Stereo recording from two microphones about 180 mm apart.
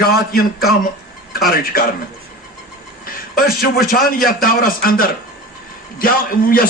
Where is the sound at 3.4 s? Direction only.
50° left (ahead or behind).